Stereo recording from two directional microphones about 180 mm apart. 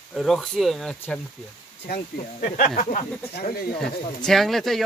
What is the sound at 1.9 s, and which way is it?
Speech, 50° left (ahead or behind).